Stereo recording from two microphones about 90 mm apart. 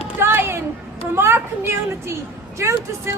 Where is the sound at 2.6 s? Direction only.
30° right (ahead or behind).